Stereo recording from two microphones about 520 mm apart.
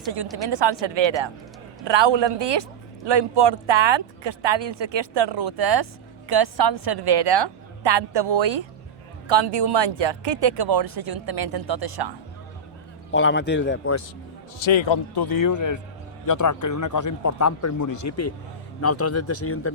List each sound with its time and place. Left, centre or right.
0.6 s speech: right
13.1 s a man's voice: left
14.6 s a man's voice: left